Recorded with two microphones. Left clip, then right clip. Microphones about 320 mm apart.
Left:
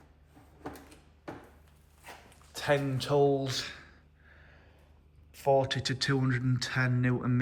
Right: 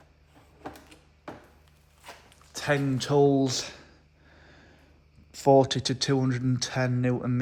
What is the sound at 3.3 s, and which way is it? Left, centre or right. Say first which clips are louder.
Speech: right 5 dB; centre.